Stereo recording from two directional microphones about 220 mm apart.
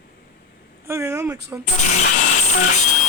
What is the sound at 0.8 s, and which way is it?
Speech, 10° right (ahead or behind).